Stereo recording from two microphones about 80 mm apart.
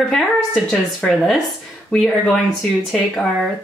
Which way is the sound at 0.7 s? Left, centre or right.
Centre.